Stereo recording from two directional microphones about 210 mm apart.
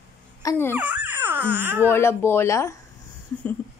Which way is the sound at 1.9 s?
10° left (ahead or behind).